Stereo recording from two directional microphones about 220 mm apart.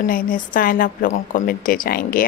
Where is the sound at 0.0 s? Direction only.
40° left (ahead or behind).